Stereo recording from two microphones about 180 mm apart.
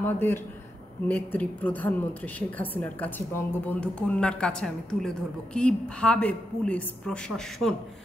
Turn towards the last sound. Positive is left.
turn(degrees=5)  # may be behind; listen again after turning